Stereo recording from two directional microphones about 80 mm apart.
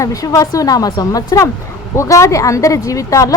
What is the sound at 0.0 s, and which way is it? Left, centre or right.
A woman's voice, left.